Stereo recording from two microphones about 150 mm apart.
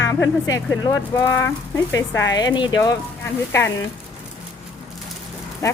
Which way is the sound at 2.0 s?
25° left (ahead or behind).